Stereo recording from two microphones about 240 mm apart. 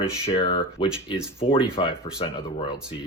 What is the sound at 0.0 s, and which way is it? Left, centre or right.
Speech, left.